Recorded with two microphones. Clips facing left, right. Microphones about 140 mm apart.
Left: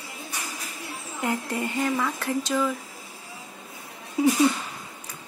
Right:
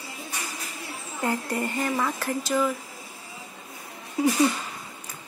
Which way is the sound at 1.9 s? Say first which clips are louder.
Left 1 dB; 10° right (ahead or behind).